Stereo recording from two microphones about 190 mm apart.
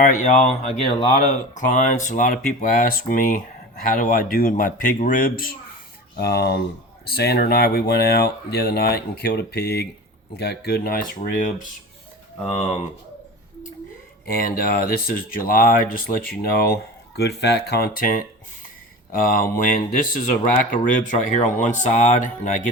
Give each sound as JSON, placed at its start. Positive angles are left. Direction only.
{"t": 0.0, "sound": "speech", "side_deg": 40}
{"t": 12.4, "sound": "speech", "side_deg": 30}
{"t": 14.3, "sound": "speech", "side_deg": 50}